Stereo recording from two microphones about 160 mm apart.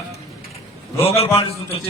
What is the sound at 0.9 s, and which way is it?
Speech, 40° left (ahead or behind).